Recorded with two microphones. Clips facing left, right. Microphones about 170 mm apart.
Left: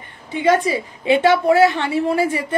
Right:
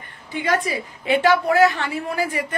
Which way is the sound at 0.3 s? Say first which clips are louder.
Left 6 dB; 25° left (ahead or behind).